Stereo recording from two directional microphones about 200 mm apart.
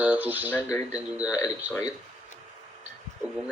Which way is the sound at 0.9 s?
5° right (ahead or behind).